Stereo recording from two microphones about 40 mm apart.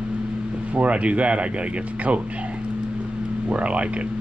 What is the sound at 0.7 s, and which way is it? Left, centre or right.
Speech, right.